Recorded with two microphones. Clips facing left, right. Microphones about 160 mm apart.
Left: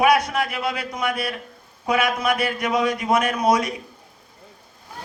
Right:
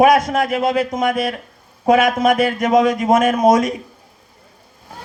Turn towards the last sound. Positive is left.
turn(degrees=-45)  # may be behind; listen again after turning